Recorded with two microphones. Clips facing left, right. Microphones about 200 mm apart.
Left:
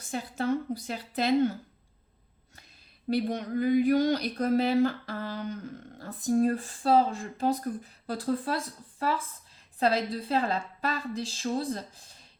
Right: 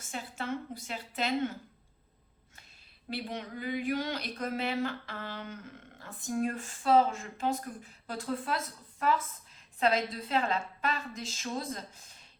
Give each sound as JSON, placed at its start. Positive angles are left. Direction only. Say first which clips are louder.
{"t": 0.1, "sound": "speech", "louder": "left 8 dB", "side_deg": 35}
{"t": 3.1, "sound": "speech", "louder": "left 9 dB", "side_deg": 45}